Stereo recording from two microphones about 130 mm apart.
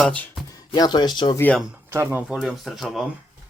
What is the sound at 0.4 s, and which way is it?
Speech, 30° left (ahead or behind).